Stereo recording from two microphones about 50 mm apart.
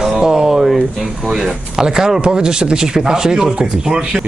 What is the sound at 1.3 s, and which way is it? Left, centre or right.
Speech, centre.